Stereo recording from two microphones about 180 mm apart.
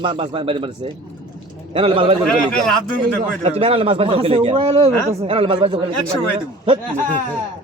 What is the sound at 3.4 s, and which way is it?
Speech, 35° right (ahead or behind).